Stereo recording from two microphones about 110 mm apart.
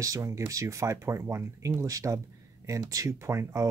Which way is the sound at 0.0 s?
30° right (ahead or behind).